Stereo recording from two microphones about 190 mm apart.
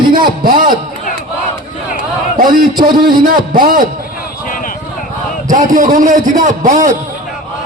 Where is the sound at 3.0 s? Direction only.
50° right (ahead or behind).